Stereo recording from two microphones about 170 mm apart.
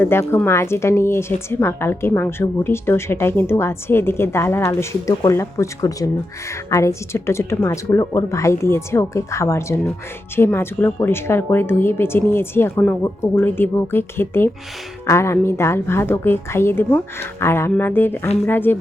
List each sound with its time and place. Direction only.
0.0 s a woman's voice: 15° left (ahead or behind)